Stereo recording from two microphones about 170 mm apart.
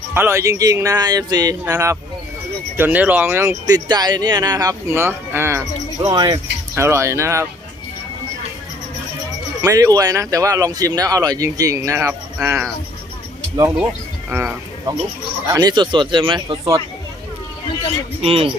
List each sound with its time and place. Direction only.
0.1 s speech: 15° right (ahead or behind)
9.6 s speech: 20° right (ahead or behind)
12.4 s speech: 5° right (ahead or behind)
15.4 s speech: 20° right (ahead or behind)
18.2 s speech: 35° right (ahead or behind)